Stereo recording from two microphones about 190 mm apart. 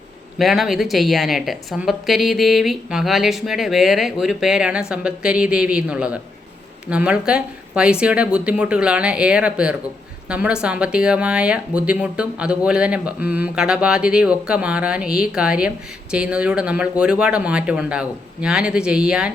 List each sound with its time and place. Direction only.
0.3 s a woman's voice: centre (ahead or behind)